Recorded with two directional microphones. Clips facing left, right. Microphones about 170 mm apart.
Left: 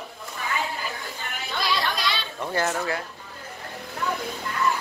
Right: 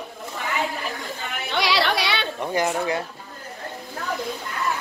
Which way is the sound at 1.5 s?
80° right.